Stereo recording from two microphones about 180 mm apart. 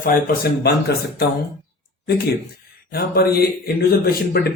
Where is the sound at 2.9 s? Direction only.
60° left (ahead or behind).